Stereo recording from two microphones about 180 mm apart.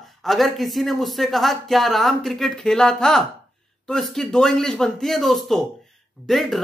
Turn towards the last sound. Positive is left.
turn(degrees=0)  # may be behind; listen again after turning